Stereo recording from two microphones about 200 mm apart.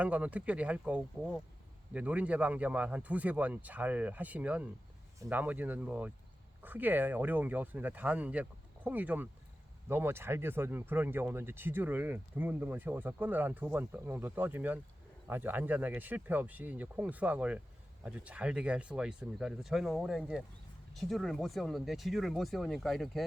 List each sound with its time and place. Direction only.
0.0 s speech: 5° right (ahead or behind)